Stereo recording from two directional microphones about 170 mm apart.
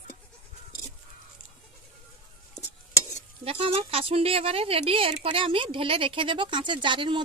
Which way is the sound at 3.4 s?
35° right (ahead or behind).